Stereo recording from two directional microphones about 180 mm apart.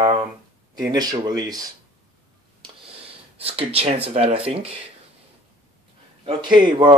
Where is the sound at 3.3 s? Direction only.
35° right (ahead or behind).